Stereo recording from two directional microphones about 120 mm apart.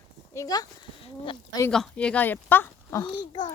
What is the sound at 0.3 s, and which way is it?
Speech, 30° left (ahead or behind).